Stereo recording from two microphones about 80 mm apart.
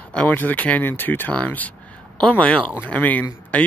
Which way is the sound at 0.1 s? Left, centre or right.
Centre.